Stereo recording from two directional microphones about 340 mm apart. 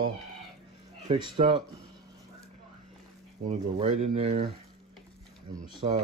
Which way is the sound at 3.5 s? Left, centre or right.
Centre.